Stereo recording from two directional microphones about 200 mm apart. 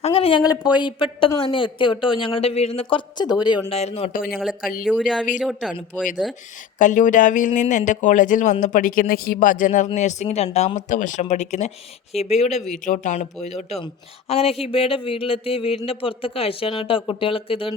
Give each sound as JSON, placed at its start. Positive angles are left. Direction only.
{"t": 0.0, "sound": "a woman's voice", "side_deg": 30}
{"t": 4.3, "sound": "speech", "side_deg": -5}
{"t": 6.7, "sound": "a woman's voice", "side_deg": 40}